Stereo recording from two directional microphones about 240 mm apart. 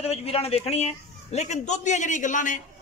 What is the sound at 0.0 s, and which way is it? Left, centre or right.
A man's voice, left.